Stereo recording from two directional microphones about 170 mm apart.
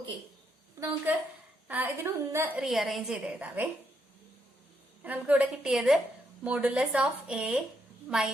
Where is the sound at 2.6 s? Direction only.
Centre (ahead or behind).